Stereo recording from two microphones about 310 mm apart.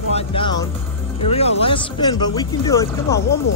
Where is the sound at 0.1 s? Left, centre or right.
Centre.